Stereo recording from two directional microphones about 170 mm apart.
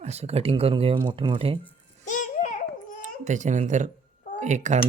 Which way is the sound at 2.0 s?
45° left (ahead or behind).